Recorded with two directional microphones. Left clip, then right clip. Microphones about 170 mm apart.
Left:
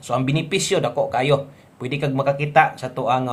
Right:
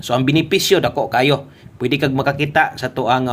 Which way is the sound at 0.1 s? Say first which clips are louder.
Right 6 dB; 25° right (ahead or behind).